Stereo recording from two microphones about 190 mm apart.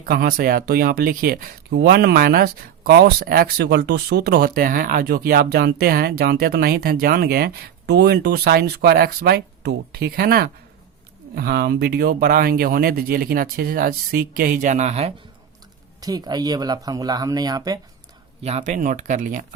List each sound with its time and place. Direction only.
0.0 s speech: 50° right (ahead or behind)
16.0 s speech: 20° right (ahead or behind)
18.4 s speech: 35° right (ahead or behind)